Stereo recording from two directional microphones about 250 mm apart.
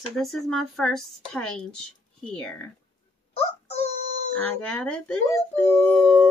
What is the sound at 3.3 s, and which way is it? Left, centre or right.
Synthetic singing, left.